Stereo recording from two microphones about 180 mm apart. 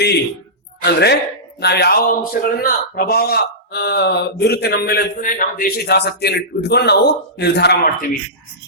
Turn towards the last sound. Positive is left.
turn(degrees=60)  # may be behind; listen again after turning